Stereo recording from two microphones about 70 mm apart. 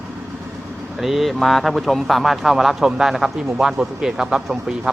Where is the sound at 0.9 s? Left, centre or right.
Centre.